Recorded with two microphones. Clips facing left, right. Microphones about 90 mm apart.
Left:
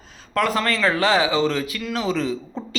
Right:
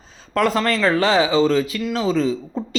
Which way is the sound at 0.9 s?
35° right (ahead or behind).